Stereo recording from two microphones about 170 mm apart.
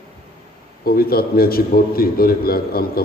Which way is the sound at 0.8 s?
60° left (ahead or behind).